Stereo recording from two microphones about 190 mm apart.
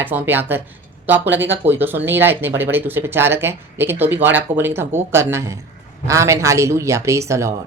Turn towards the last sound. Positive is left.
turn(degrees=-15)  # may be behind; listen again after turning